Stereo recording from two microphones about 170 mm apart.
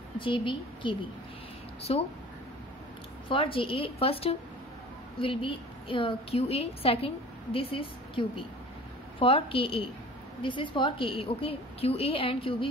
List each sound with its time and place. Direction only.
0.2 s a woman's voice: 30° left (ahead or behind)
3.3 s a woman's voice: 30° left (ahead or behind)